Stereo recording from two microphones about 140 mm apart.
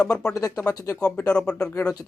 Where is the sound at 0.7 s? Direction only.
25° left (ahead or behind).